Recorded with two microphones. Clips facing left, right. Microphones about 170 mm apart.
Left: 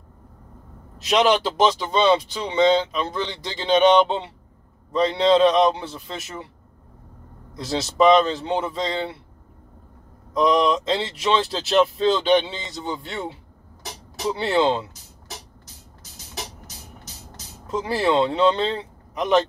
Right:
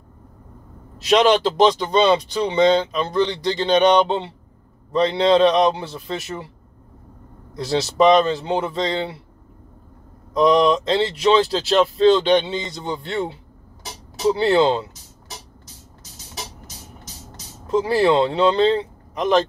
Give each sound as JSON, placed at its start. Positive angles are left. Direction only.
{"t": 1.0, "sound": "speech", "side_deg": 0}
{"t": 7.5, "sound": "speech", "side_deg": 0}
{"t": 10.3, "sound": "speech", "side_deg": 0}
{"t": 17.6, "sound": "speech", "side_deg": 0}